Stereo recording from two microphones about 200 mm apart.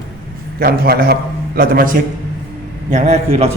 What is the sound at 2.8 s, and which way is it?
Speech, 35° right (ahead or behind).